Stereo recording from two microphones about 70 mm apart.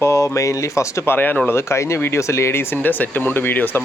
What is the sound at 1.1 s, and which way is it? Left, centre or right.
Speech, left.